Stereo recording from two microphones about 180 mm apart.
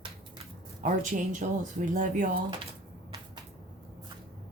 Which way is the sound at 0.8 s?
45° right (ahead or behind).